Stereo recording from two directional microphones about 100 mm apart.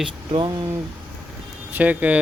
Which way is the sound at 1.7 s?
15° right (ahead or behind).